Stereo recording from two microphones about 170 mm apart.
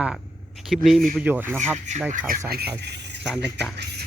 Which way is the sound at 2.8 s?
80° right.